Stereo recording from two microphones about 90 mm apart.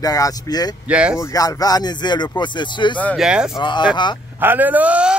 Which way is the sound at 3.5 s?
60° left (ahead or behind).